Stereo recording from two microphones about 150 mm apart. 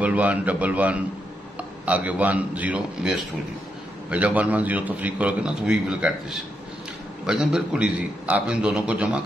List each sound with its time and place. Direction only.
0.0 s a man's voice: 10° right (ahead or behind)